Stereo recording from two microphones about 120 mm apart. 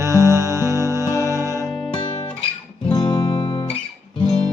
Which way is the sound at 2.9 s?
35° left (ahead or behind).